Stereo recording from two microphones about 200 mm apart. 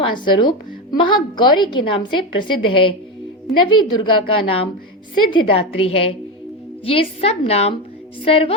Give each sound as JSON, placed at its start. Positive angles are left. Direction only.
{"t": 0.0, "sound": "a woman's voice", "side_deg": 25}